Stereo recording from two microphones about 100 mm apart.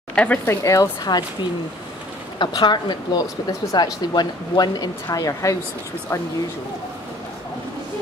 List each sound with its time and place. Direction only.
0.1 s speech: 10° left (ahead or behind)
0.5 s a woman's voice: 35° left (ahead or behind)
2.3 s a woman's voice: 50° left (ahead or behind)